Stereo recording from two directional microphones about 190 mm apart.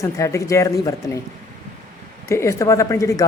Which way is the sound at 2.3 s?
15° left (ahead or behind).